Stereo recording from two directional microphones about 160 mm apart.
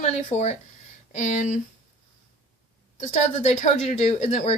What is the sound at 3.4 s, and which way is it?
Speech, 50° left (ahead or behind).